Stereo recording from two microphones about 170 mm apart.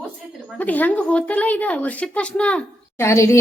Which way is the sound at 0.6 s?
10° left (ahead or behind).